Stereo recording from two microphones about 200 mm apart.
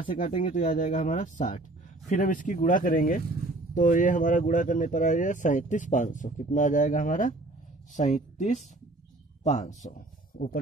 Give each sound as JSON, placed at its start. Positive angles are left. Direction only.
{"t": 0.4, "sound": "speech", "side_deg": 40}